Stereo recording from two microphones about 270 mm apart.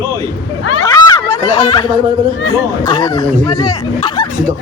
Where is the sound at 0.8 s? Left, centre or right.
Centre.